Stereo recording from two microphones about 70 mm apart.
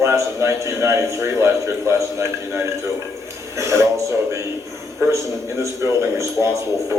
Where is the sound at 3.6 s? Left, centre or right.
Right.